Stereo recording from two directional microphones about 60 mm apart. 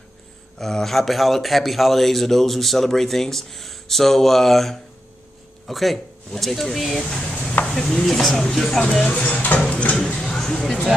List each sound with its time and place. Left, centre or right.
0.6 s speech: centre
9.0 s speech: centre
9.7 s a sound: centre